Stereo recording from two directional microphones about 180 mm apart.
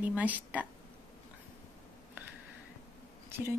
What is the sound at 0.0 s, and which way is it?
Speech, 10° right (ahead or behind).